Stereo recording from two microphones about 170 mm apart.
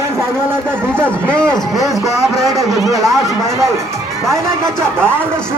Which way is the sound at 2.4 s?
20° right (ahead or behind).